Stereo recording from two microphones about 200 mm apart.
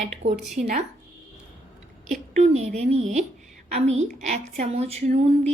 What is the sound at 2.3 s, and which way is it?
A woman's voice, 35° right (ahead or behind).